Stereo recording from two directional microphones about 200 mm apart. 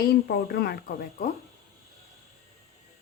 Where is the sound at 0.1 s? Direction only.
50° left (ahead or behind).